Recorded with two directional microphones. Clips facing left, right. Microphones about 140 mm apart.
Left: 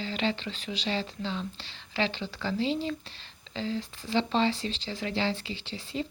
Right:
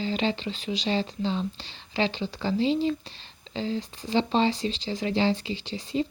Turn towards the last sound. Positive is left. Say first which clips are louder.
# right 6 dB
turn(degrees=-15)  # may be behind; listen again after turning